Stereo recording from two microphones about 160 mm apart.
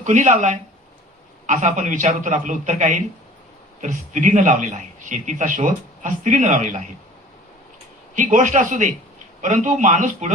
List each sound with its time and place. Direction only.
0.0 s a man's voice: 50° right (ahead or behind)
8.1 s a man's voice: 50° right (ahead or behind)